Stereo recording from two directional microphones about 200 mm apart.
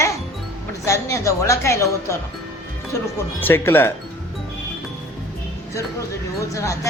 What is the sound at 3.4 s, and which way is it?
Speech, 10° left (ahead or behind).